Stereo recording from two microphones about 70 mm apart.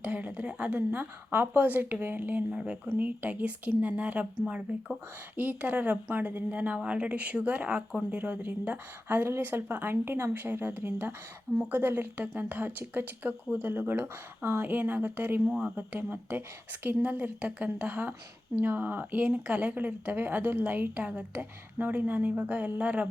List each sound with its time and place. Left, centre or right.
0.0 s speech: centre
15.4 s speech: centre
15.7 s speech: right